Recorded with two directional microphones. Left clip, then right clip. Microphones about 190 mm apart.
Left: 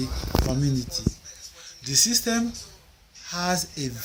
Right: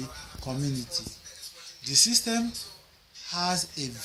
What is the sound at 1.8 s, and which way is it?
Speech, 45° left (ahead or behind).